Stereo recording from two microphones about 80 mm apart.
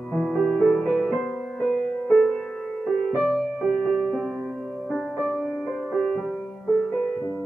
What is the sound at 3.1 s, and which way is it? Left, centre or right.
Music, centre.